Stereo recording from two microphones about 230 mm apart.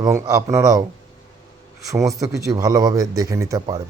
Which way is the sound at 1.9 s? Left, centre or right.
Centre.